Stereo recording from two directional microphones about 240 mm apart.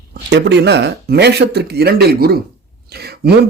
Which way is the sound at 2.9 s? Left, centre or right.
Right.